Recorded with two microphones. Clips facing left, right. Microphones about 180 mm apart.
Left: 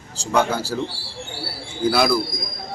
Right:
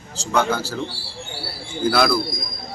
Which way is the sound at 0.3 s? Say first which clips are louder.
Left 1 dB; 10° left (ahead or behind).